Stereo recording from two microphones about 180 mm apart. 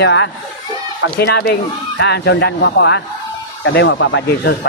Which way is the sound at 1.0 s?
65° left (ahead or behind).